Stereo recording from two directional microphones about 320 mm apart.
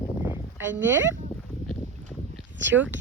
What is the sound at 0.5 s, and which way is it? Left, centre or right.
Speech, centre.